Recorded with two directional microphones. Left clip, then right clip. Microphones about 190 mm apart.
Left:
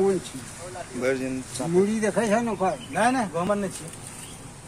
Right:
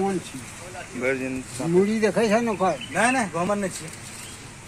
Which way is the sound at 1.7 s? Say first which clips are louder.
Right 2 dB; 35° right (ahead or behind).